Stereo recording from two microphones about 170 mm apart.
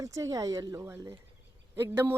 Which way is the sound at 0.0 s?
20° right (ahead or behind).